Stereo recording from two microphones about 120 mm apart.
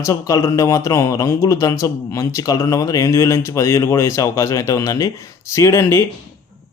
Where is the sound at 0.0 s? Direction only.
25° left (ahead or behind).